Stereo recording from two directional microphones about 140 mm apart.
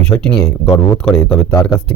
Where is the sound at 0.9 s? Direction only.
10° left (ahead or behind).